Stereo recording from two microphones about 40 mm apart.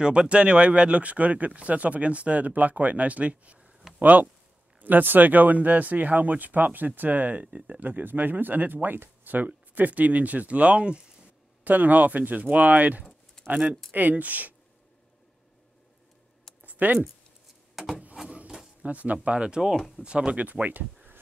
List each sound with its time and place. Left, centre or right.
0.0 s speech: right
4.0 s speech: right
11.6 s speech: right
13.0 s a sound: centre
13.9 s speech: right
16.6 s a sound: right
17.8 s a sound: centre
18.8 s speech: right
19.2 s speech: right
20.4 s speech: right